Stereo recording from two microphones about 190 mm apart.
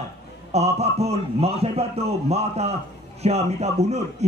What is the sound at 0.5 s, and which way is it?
A man's voice, 35° right (ahead or behind).